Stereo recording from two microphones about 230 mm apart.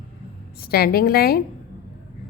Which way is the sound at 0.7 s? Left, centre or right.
Left.